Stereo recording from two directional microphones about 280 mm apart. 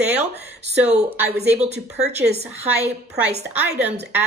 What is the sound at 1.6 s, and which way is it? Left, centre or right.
Speech, right.